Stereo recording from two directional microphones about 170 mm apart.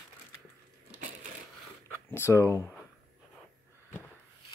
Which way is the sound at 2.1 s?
15° left (ahead or behind).